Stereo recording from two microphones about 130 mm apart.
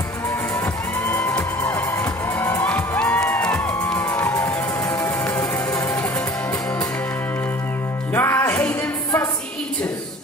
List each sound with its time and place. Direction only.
1.0 s music: 15° left (ahead or behind)
4.0 s music: 20° left (ahead or behind)
8.1 s music: 15° left (ahead or behind)